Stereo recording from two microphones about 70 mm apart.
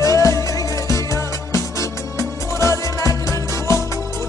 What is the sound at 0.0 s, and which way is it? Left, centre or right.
Music, left.